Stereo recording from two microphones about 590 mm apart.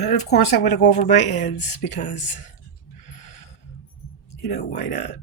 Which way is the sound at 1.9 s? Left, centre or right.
Centre.